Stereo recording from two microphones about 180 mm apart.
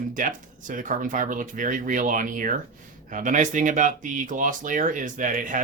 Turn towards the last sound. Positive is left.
turn(degrees=-45)  # may be behind; listen again after turning